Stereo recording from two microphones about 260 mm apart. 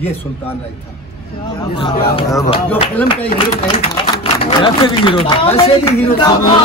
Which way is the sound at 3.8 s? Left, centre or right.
Left.